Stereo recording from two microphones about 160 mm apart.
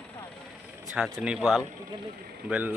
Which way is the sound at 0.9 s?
Centre (ahead or behind).